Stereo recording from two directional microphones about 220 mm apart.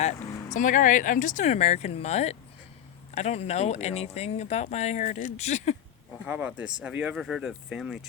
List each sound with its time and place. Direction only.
0.5 s speech: 35° left (ahead or behind)
6.2 s speech: 5° right (ahead or behind)